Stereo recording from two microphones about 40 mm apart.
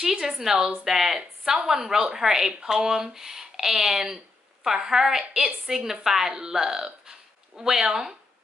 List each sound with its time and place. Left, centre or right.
0.0 s a woman's voice: centre